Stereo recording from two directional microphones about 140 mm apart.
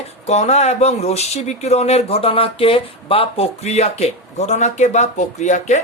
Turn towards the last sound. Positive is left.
turn(degrees=60)  # may be behind; listen again after turning